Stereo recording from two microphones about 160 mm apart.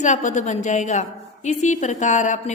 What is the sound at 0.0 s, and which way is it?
A woman's voice, 50° left (ahead or behind).